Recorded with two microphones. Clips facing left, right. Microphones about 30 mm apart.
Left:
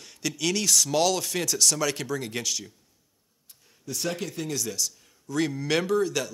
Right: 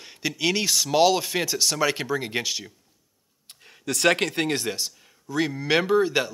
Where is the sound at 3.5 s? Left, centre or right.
Right.